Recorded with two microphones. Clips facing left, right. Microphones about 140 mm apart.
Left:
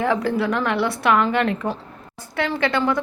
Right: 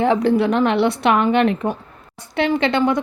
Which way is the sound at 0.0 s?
25° right (ahead or behind).